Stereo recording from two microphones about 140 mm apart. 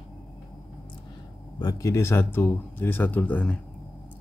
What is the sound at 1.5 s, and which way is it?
Speech, 25° left (ahead or behind).